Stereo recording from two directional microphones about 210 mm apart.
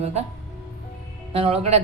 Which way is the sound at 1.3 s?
30° right (ahead or behind).